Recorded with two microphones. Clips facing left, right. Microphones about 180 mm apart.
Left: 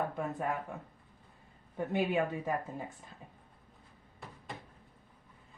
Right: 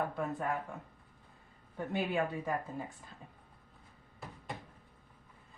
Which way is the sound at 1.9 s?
20° left (ahead or behind).